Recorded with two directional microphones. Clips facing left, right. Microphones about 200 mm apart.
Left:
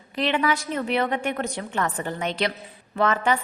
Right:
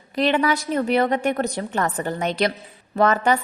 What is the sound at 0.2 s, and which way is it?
A woman's voice, 40° right (ahead or behind).